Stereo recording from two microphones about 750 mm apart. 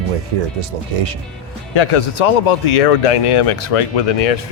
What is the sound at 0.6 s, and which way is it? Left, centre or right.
Speech, right.